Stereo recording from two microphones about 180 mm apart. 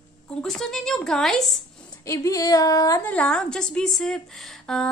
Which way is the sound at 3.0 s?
5° left (ahead or behind).